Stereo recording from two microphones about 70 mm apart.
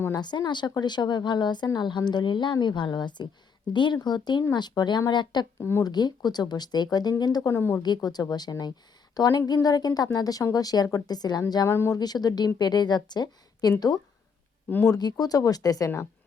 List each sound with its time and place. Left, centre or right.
0.1 s a woman's voice: left
5.5 s speech: left
5.8 s speech: left
7.5 s speech: left
7.8 s speech: left
12.5 s a woman's voice: left
15.2 s speech: left